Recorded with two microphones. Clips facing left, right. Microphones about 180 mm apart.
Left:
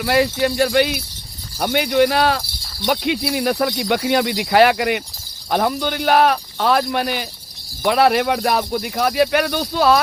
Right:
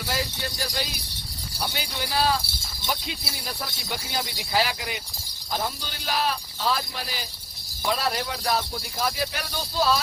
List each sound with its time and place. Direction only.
0.0 s speech: 70° left (ahead or behind)